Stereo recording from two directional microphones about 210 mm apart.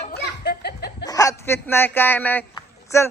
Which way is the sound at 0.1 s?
50° left (ahead or behind).